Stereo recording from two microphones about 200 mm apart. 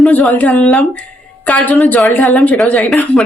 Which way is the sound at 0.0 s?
5° left (ahead or behind).